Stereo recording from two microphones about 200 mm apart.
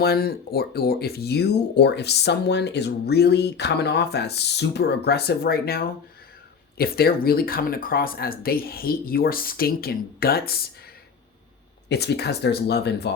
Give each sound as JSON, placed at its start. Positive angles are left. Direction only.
{"t": 0.0, "sound": "speech", "side_deg": 50}
{"t": 11.9, "sound": "speech", "side_deg": 55}